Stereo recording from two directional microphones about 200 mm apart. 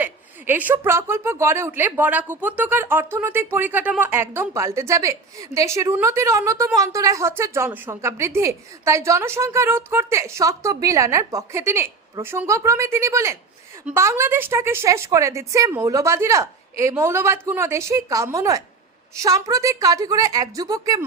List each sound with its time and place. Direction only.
0.0 s speech: 10° right (ahead or behind)